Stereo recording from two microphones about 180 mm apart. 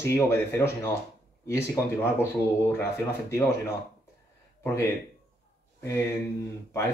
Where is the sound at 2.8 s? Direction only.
15° left (ahead or behind).